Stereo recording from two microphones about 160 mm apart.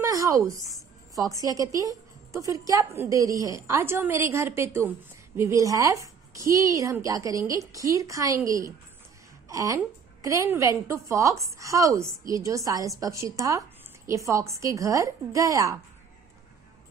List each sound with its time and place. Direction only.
0.0 s a woman's voice: 20° right (ahead or behind)